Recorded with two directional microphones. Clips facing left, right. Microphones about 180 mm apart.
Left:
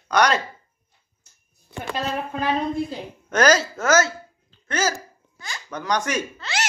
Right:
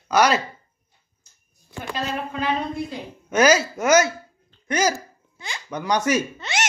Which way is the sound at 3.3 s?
10° right (ahead or behind).